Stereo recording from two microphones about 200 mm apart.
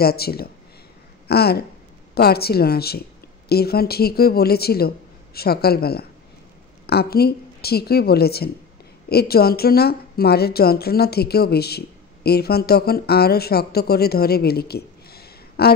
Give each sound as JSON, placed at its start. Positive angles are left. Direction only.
{"t": 0.0, "sound": "a woman's voice", "side_deg": 50}